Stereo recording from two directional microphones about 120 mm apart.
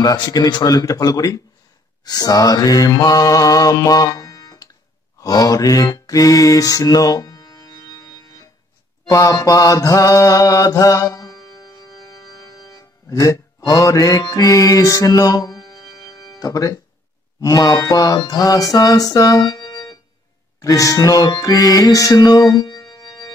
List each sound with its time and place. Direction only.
0.0 s music: 35° left (ahead or behind)
2.0 s mantra: 30° left (ahead or behind)
15.6 s music: 30° left (ahead or behind)